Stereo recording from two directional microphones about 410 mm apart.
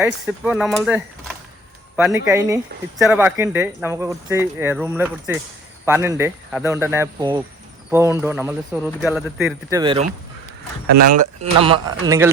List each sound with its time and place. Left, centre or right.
0.0 s speech: centre
2.3 s speech: centre
10.9 s speech: right